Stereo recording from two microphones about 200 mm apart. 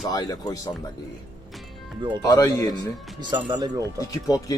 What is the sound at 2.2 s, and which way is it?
Speech, 15° left (ahead or behind).